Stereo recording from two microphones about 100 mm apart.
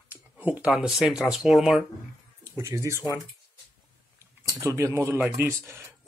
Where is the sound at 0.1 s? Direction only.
15° right (ahead or behind).